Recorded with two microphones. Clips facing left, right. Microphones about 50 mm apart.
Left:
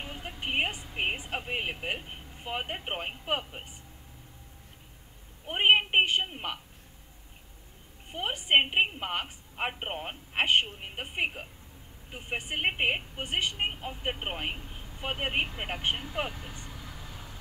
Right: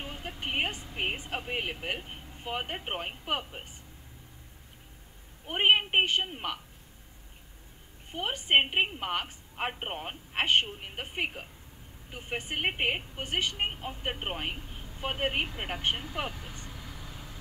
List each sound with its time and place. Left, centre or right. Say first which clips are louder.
0.0 s vehicle: even; centre
0.7 s a woman's voice: left 1 dB; centre
5.5 s a woman's voice: left 1 dB; centre
8.1 s a woman's voice: even; centre
16.5 s vehicle: even; left